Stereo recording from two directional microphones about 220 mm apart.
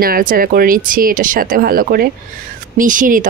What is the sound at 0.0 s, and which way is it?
Speech, 40° right (ahead or behind).